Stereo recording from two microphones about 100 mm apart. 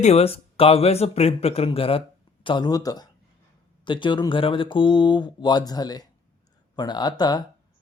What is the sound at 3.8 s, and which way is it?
Speech, 55° left (ahead or behind).